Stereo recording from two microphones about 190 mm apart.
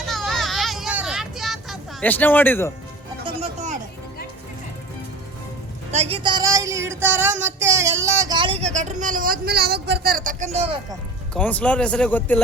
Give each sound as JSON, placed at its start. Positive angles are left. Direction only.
{"t": 0.0, "sound": "vehicle", "side_deg": 0}
{"t": 3.2, "sound": "music", "side_deg": -35}
{"t": 5.9, "sound": "speech", "side_deg": -30}
{"t": 11.3, "sound": "speech", "side_deg": 5}